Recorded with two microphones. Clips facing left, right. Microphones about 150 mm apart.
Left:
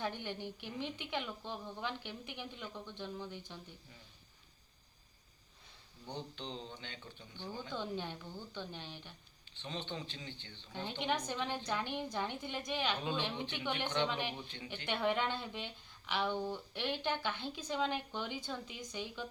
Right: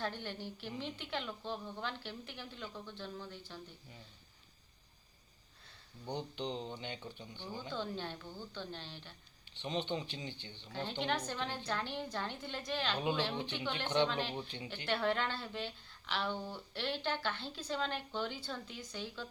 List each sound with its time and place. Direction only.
0.0 s speech: 15° left (ahead or behind)
6.1 s speech: 15° right (ahead or behind)
7.7 s speech: 15° left (ahead or behind)
9.6 s speech: 15° right (ahead or behind)
10.7 s speech: 15° left (ahead or behind)